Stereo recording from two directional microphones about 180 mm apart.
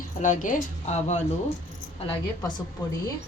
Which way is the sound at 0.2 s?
45° left (ahead or behind).